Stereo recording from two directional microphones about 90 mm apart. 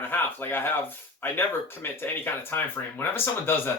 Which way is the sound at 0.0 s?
25° left (ahead or behind).